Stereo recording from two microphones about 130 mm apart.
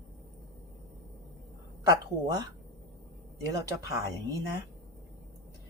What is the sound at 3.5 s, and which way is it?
Speech, 25° right (ahead or behind).